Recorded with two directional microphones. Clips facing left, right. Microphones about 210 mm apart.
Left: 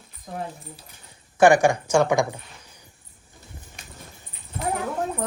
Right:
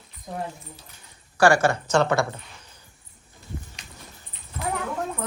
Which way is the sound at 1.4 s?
20° left (ahead or behind).